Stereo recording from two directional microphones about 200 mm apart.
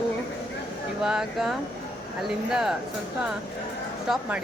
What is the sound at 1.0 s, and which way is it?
Speech, 5° right (ahead or behind).